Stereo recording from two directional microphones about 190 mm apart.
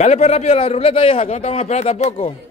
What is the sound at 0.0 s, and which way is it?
A man's voice, 35° left (ahead or behind).